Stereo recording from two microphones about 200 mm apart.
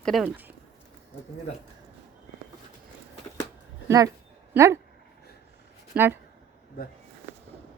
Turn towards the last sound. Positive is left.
turn(degrees=-5)  # may be behind; listen again after turning